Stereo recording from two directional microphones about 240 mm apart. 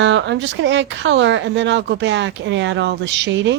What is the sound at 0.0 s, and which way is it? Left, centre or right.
Speech, right.